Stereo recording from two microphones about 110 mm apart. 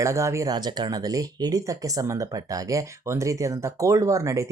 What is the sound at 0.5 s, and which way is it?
Speech, 40° right (ahead or behind).